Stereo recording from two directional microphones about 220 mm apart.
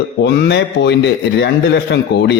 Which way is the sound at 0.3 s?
50° left (ahead or behind).